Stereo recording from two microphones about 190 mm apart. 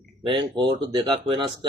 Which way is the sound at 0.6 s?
25° right (ahead or behind).